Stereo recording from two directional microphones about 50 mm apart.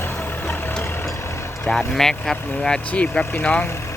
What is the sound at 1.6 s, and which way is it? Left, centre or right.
Speech, centre.